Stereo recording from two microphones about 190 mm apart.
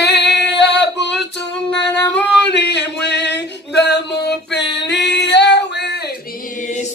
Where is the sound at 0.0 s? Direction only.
65° left (ahead or behind).